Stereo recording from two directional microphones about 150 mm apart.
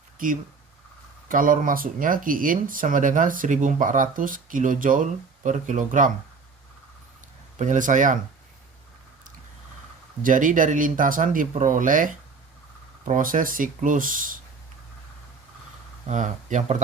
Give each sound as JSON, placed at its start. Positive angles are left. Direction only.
{"t": 1.3, "sound": "speech", "side_deg": -65}
{"t": 7.6, "sound": "speech", "side_deg": -60}
{"t": 10.2, "sound": "speech", "side_deg": -60}
{"t": 16.0, "sound": "speech", "side_deg": -55}